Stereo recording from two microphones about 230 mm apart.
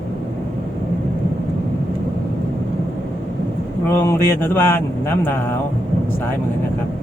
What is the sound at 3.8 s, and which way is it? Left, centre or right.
Speech, centre.